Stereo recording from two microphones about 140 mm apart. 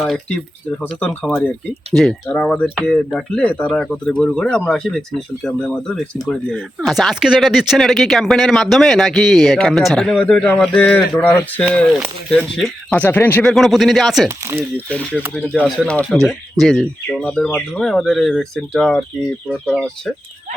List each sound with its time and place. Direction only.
0.0 s speech: centre (ahead or behind)
13.4 s speech: centre (ahead or behind)
14.3 s speech: 20° right (ahead or behind)
15.4 s speech: 10° left (ahead or behind)
16.2 s speech: centre (ahead or behind)